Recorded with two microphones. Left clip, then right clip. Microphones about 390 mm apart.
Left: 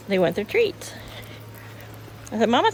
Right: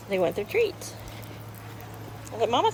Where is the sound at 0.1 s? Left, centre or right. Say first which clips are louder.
Left 4 dB; left.